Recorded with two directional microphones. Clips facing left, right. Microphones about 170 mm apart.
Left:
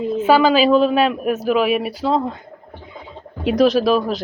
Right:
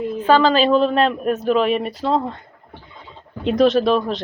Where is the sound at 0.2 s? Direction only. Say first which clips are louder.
Left 1 dB; 10° left (ahead or behind).